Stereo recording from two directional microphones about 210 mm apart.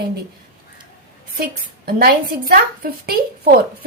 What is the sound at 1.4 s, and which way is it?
A woman's voice, 45° right (ahead or behind).